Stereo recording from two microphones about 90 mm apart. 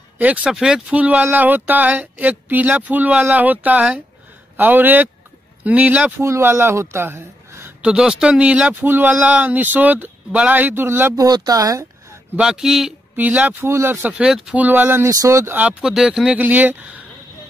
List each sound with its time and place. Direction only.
0.2 s speech: 15° right (ahead or behind)
6.2 s speech: 30° right (ahead or behind)
7.8 s speech: 10° right (ahead or behind)
11.1 s speech: 45° right (ahead or behind)
12.4 s speech: 5° right (ahead or behind)
13.1 s speech: 15° right (ahead or behind)
13.7 s speech: 30° right (ahead or behind)
14.1 s speech: 5° right (ahead or behind)
14.5 s speech: 20° right (ahead or behind)
15.0 s speech: 35° right (ahead or behind)
15.5 s speech: 15° right (ahead or behind)
16.3 s speech: 20° right (ahead or behind)